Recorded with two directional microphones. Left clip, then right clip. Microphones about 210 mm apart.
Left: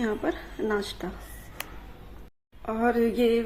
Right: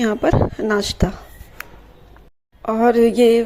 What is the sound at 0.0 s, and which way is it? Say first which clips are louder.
A woman's voice: right 12 dB; 40° right (ahead or behind).